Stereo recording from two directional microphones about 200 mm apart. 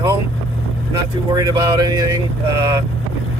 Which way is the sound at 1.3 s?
20° right (ahead or behind).